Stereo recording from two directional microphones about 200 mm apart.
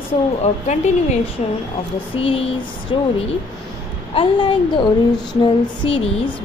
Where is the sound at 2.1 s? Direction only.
30° left (ahead or behind).